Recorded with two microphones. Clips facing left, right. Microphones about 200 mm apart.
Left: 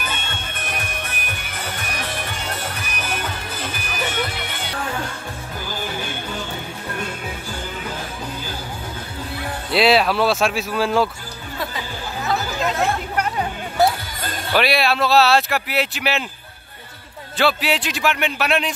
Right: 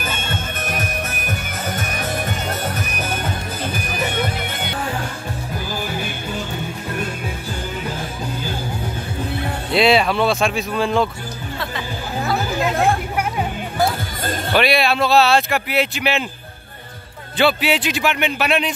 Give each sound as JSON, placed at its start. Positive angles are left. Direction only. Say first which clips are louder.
{"t": 0.6, "sound": "music", "louder": "right 3 dB", "side_deg": -45}
{"t": 9.7, "sound": "speech", "louder": "right 1 dB", "side_deg": 0}
{"t": 13.1, "sound": "music", "louder": "right 1 dB", "side_deg": -10}
{"t": 14.5, "sound": "speech", "louder": "right 1 dB", "side_deg": 0}
{"t": 17.4, "sound": "speech", "louder": "right 2 dB", "side_deg": 0}